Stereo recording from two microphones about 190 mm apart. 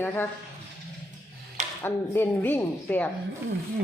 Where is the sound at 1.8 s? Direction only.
10° left (ahead or behind).